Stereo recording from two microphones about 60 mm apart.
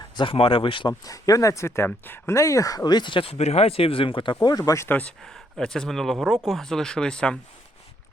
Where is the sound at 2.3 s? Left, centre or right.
Left.